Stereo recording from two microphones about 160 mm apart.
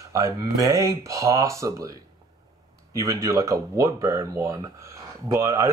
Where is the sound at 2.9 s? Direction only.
20° right (ahead or behind).